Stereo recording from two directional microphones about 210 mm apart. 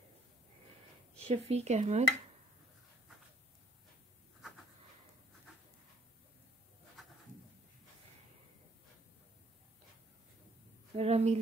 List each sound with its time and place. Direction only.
1.2 s speech: 30° right (ahead or behind)
7.0 s goat: centre (ahead or behind)
11.0 s a sound: 30° right (ahead or behind)